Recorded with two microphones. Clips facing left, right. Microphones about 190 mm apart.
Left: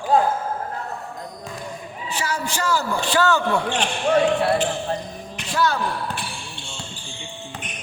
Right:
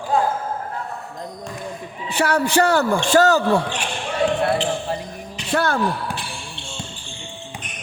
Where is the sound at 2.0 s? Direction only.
60° right (ahead or behind).